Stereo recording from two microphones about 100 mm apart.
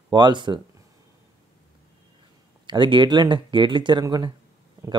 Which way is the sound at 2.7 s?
50° right (ahead or behind).